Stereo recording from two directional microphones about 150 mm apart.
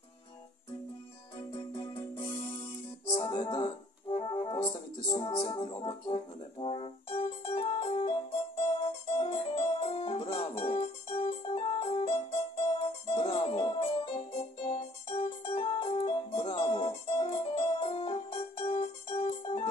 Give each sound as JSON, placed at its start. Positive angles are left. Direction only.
{"t": 1.8, "sound": "music", "side_deg": 35}
{"t": 3.2, "sound": "keyboard", "side_deg": 30}
{"t": 4.2, "sound": "music", "side_deg": 25}
{"t": 5.1, "sound": "brass instrument", "side_deg": 30}
{"t": 8.8, "sound": "music", "side_deg": 40}
{"t": 17.0, "sound": "keyboard", "side_deg": 30}